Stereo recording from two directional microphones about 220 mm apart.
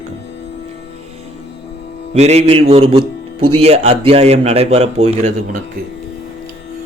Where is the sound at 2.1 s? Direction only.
30° right (ahead or behind).